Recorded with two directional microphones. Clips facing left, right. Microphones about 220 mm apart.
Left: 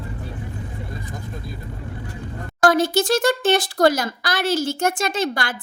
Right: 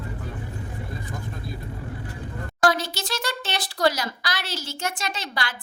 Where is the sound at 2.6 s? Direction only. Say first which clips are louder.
Left 7 dB; 50° left (ahead or behind).